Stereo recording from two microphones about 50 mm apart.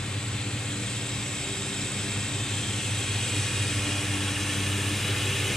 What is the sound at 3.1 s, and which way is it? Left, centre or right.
Vehicle, centre.